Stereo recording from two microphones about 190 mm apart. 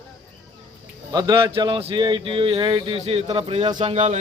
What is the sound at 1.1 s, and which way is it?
A man's voice, 20° right (ahead or behind).